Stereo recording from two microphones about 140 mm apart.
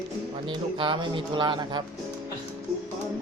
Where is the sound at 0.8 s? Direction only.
35° right (ahead or behind).